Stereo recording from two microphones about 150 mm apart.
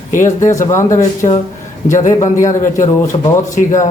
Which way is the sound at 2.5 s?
60° left (ahead or behind).